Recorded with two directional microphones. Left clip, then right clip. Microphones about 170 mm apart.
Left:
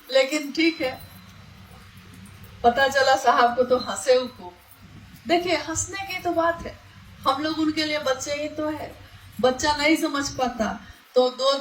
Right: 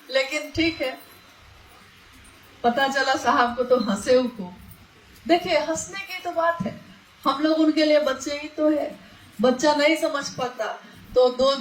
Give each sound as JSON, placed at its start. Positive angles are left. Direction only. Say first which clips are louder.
{"t": 0.1, "sound": "music", "louder": "left 3 dB", "side_deg": 45}
{"t": 2.6, "sound": "speech", "louder": "left 2 dB", "side_deg": 45}
{"t": 5.3, "sound": "speech", "louder": "right 2 dB", "side_deg": 45}